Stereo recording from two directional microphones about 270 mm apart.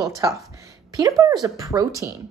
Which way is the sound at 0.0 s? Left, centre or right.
Centre.